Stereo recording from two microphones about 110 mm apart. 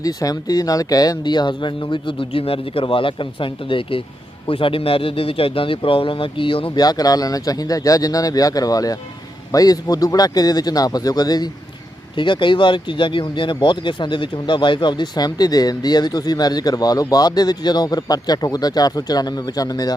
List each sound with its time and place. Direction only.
0.0 s speech: 35° left (ahead or behind); by 6.7 s 50° left (ahead or behind)
6.7 s speech: 35° left (ahead or behind)